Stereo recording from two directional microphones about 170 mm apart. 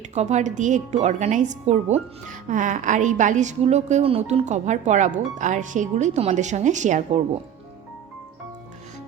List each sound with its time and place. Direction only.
0.1 s speech: 40° right (ahead or behind)